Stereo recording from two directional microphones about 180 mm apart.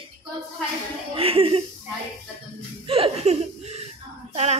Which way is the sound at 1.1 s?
30° right (ahead or behind).